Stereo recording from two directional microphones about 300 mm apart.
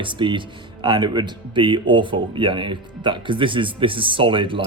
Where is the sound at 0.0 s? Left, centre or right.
Centre.